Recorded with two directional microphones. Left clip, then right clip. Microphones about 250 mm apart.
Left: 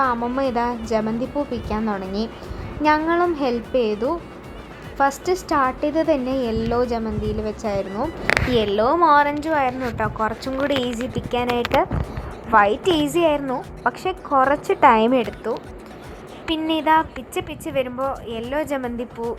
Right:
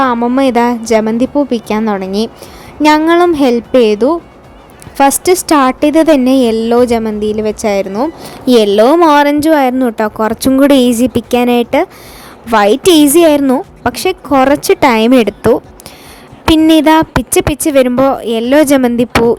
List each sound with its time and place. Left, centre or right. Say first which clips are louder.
0.0 s a woman's voice: right 10 dB; right
16.5 s a woman's voice: right 12 dB; right